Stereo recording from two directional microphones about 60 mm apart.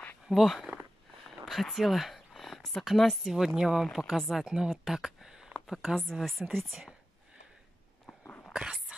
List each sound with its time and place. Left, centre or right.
0.3 s speech: centre
1.5 s speech: centre
5.9 s speech: centre
8.2 s a sound: left